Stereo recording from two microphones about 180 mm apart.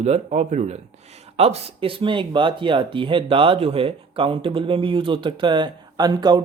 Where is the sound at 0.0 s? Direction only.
40° right (ahead or behind).